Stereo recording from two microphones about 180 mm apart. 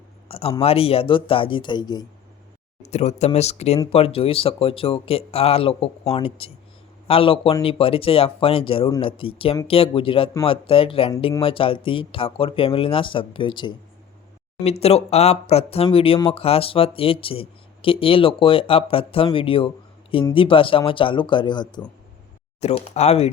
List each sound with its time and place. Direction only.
0.3 s a sound: 30° left (ahead or behind)
0.6 s speech: 30° left (ahead or behind)
2.9 s speech: 40° left (ahead or behind)
22.6 s speech: 35° left (ahead or behind)